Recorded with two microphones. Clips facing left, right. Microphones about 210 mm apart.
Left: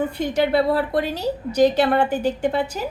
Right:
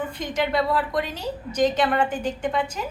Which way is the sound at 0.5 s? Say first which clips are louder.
Left 4 dB; 40° left (ahead or behind).